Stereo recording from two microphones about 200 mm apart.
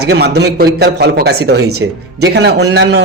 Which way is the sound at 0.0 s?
60° right (ahead or behind).